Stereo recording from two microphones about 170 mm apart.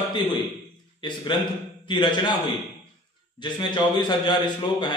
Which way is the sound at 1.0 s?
25° left (ahead or behind).